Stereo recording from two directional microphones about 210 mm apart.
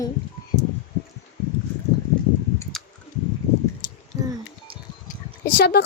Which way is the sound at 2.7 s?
Centre (ahead or behind).